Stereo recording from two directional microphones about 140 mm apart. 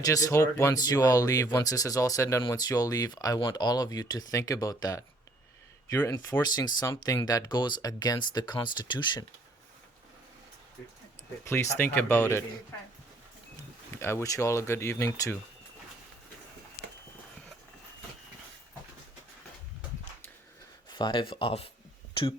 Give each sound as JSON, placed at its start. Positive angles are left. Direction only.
{"t": 0.0, "sound": "speech", "side_deg": 25}
{"t": 6.4, "sound": "speech", "side_deg": 30}
{"t": 10.8, "sound": "speech", "side_deg": 5}
{"t": 11.4, "sound": "speech", "side_deg": 20}
{"t": 14.0, "sound": "speech", "side_deg": 20}
{"t": 20.9, "sound": "speech", "side_deg": 35}